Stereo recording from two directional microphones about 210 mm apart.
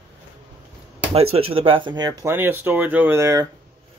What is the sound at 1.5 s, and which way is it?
Speech, 25° right (ahead or behind).